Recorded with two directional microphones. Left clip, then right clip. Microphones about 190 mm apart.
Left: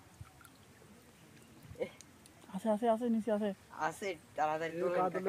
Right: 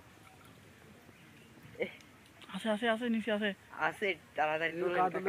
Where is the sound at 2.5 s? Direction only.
25° left (ahead or behind).